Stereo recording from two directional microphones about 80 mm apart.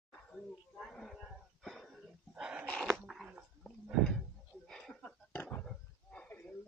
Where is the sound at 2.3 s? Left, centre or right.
Centre.